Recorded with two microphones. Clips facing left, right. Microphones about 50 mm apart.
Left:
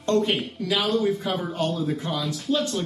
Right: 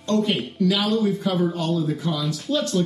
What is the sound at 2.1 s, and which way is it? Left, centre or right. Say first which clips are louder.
Speech: right 1 dB; centre.